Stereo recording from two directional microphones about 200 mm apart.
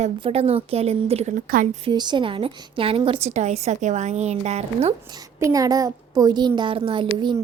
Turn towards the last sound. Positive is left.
turn(degrees=-20)  # may be behind; listen again after turning